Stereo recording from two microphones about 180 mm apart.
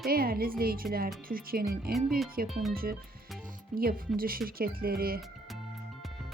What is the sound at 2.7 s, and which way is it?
Speech, 55° right (ahead or behind).